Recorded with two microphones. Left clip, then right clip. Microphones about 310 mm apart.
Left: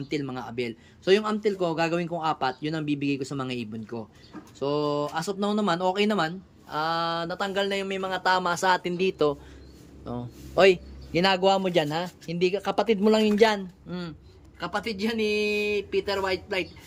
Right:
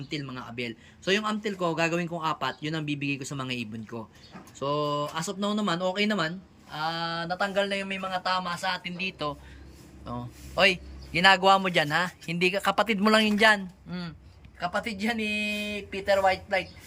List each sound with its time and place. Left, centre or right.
0.1 s a man's voice: centre